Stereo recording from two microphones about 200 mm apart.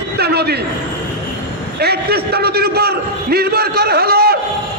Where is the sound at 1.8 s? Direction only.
50° right (ahead or behind).